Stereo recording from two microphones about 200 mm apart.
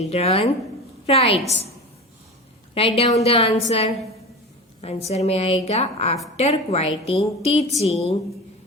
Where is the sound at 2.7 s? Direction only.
30° left (ahead or behind).